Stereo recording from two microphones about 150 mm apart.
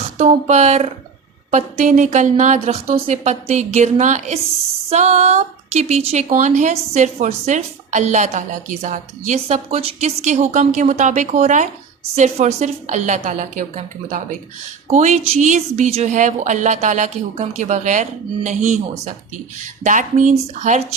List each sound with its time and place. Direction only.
0.2 s a woman's voice: 50° right (ahead or behind)